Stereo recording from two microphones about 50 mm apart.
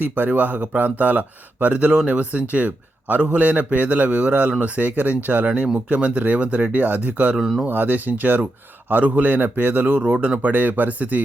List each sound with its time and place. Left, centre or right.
0.0 s speech: right